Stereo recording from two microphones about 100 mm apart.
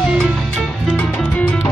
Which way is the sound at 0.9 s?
15° left (ahead or behind).